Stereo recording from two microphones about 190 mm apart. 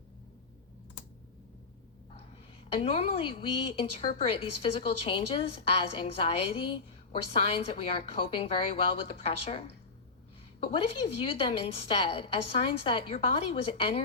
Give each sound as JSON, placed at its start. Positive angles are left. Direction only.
{"t": 2.8, "sound": "a woman's voice", "side_deg": 30}